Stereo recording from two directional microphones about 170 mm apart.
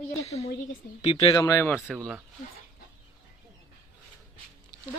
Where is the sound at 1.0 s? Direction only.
40° left (ahead or behind).